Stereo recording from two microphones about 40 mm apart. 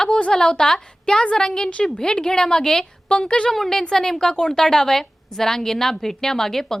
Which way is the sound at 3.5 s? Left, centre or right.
Centre.